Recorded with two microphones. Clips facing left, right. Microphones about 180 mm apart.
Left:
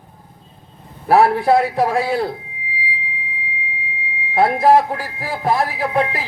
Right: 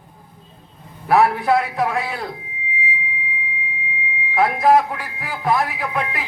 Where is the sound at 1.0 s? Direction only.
35° left (ahead or behind).